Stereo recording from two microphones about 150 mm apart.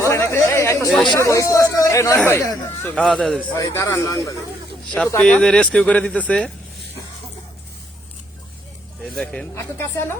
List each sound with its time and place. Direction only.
0.0 s chatter: 20° left (ahead or behind)
1.0 s speech: 25° left (ahead or behind)
2.9 s speech: 5° left (ahead or behind)
3.6 s speech: 20° left (ahead or behind)
5.0 s speech: 10° left (ahead or behind)
9.0 s speech: 5° left (ahead or behind)
9.6 s speech: 15° left (ahead or behind)